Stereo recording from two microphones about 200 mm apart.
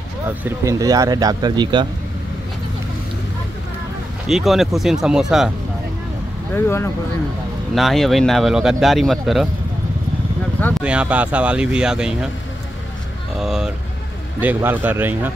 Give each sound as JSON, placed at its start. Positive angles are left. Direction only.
{"t": 0.4, "sound": "speech", "side_deg": -10}
{"t": 4.3, "sound": "speech", "side_deg": 0}
{"t": 6.5, "sound": "speech", "side_deg": 15}
{"t": 7.7, "sound": "speech", "side_deg": 0}
{"t": 10.8, "sound": "speech", "side_deg": -5}
{"t": 13.4, "sound": "speech", "side_deg": 0}